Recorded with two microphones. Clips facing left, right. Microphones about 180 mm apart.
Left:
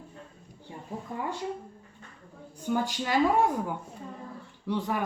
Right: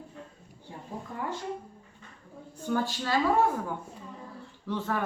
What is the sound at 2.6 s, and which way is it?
Speech, 15° left (ahead or behind).